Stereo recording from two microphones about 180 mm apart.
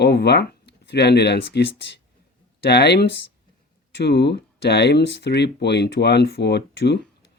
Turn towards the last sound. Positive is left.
turn(degrees=70)  # may be behind; listen again after turning